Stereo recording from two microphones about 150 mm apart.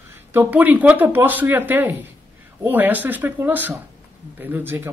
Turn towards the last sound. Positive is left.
turn(degrees=-15)  # may be behind; listen again after turning